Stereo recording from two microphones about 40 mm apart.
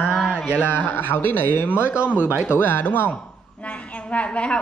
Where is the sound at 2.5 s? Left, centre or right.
Left.